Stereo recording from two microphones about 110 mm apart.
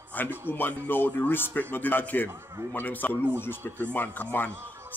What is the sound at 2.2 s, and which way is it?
Speech, 25° right (ahead or behind).